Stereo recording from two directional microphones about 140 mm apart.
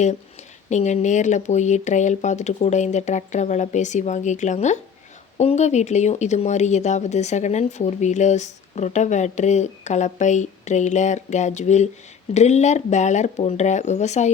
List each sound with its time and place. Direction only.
0.7 s speech: 55° left (ahead or behind)